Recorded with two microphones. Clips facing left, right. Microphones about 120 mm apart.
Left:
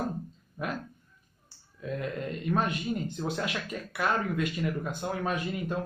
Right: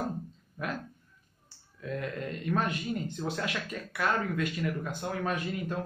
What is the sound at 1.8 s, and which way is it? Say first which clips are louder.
Speech: left 1 dB; 20° left (ahead or behind).